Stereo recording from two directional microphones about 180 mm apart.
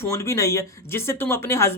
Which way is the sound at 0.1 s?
15° left (ahead or behind).